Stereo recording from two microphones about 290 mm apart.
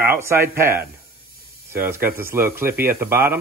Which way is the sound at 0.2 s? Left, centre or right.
Centre.